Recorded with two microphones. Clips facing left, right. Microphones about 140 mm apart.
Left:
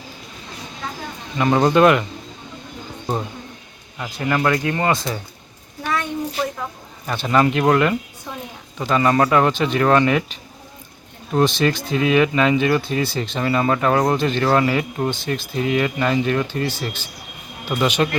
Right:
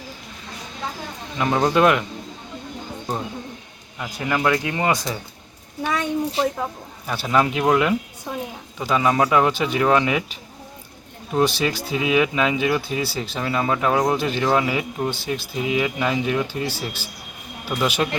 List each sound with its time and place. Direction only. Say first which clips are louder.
1.4 s speech: left 3 dB; centre (ahead or behind)
4.3 s speech: left 2 dB; 10° right (ahead or behind)
7.1 s speech: left 3 dB; 5° right (ahead or behind)
8.3 s a sound: right 5 dB; 10° right (ahead or behind)
8.8 s speech: left 2 dB; 5° right (ahead or behind)